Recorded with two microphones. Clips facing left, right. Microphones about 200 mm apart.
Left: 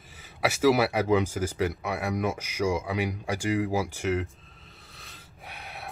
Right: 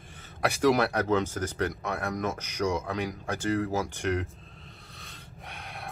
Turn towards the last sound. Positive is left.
turn(degrees=5)  # may be behind; listen again after turning